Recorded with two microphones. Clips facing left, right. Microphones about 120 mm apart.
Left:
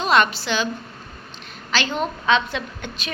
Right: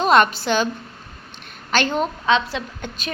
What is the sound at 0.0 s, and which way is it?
Speech, 45° right (ahead or behind).